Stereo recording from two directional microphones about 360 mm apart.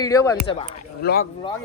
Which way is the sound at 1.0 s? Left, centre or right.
Left.